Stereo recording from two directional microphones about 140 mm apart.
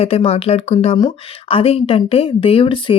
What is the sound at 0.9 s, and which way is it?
Speech, 35° left (ahead or behind).